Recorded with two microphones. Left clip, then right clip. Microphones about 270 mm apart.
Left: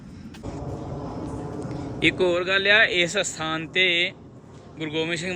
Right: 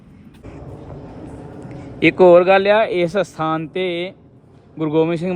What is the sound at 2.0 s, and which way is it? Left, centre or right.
Speech, centre.